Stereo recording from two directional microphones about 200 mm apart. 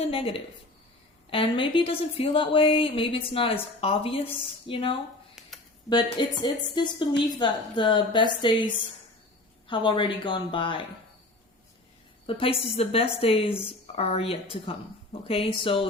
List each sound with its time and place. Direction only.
0.0 s a woman's voice: 25° left (ahead or behind)
6.4 s a woman's voice: 20° left (ahead or behind)
12.2 s a woman's voice: 25° left (ahead or behind)